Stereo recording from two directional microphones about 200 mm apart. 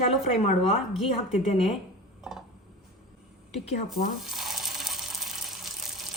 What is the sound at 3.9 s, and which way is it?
Water, centre (ahead or behind).